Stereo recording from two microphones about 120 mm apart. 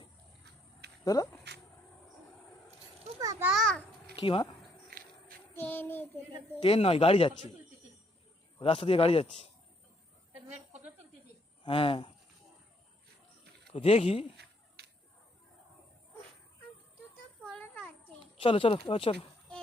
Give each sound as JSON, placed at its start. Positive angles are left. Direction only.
{"t": 1.0, "sound": "speech", "side_deg": 30}
{"t": 3.2, "sound": "children playing", "side_deg": -30}
{"t": 3.5, "sound": "a sound", "side_deg": 5}
{"t": 4.1, "sound": "speech", "side_deg": 45}
{"t": 5.5, "sound": "child singing", "side_deg": 15}
{"t": 6.6, "sound": "speech", "side_deg": 50}
{"t": 8.5, "sound": "speech", "side_deg": 50}
{"t": 10.5, "sound": "a sound", "side_deg": -70}
{"t": 11.6, "sound": "speech", "side_deg": 45}
{"t": 13.7, "sound": "speech", "side_deg": 55}
{"t": 17.4, "sound": "a sound", "side_deg": 10}
{"t": 18.3, "sound": "speech", "side_deg": 50}